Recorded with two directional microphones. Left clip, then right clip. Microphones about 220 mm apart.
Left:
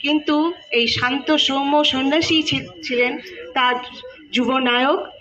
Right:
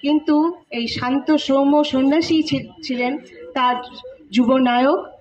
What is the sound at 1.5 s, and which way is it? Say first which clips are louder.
A woman's voice: right 1 dB; 55° right (ahead or behind).